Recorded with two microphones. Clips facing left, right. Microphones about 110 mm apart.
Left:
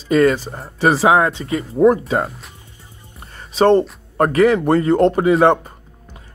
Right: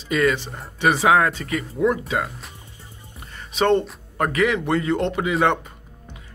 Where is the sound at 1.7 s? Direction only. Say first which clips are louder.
Left 8 dB; 40° left (ahead or behind).